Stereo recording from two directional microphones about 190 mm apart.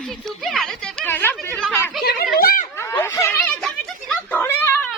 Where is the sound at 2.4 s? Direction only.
50° left (ahead or behind).